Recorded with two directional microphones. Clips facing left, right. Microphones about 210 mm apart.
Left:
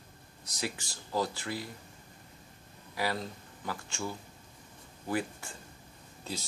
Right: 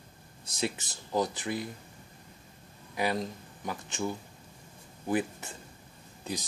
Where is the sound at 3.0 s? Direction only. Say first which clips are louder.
Right 3 dB; 20° right (ahead or behind).